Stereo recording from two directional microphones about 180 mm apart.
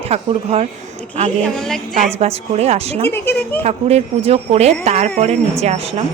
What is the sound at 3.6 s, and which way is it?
Speech, 35° right (ahead or behind).